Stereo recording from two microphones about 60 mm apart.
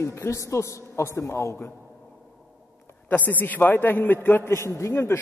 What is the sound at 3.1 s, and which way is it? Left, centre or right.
A man's voice, left.